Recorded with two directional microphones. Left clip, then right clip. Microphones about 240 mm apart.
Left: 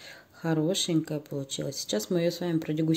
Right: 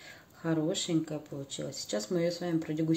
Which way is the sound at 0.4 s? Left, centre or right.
Left.